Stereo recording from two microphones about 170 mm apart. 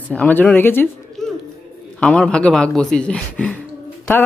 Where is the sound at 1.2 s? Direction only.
Centre (ahead or behind).